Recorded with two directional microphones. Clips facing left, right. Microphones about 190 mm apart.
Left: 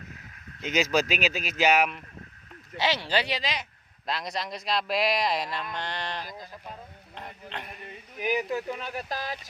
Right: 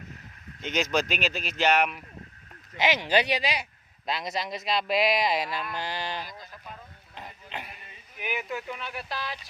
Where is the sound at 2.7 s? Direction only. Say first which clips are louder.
Right 3 dB; 15° right (ahead or behind).